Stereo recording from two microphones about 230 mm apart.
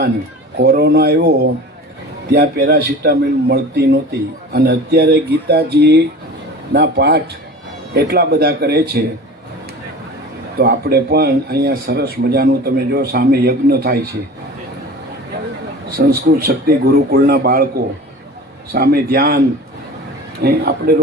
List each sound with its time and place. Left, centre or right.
0.6 s a man's voice: right
10.6 s a man's voice: right
16.0 s a man's voice: right
20.4 s a man's voice: right